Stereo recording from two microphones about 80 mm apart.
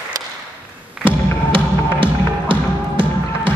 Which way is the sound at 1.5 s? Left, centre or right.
Right.